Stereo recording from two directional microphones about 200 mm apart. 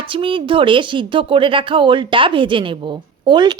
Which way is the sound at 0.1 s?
25° right (ahead or behind).